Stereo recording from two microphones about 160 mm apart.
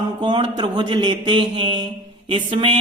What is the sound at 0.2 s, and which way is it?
Speech, 30° right (ahead or behind).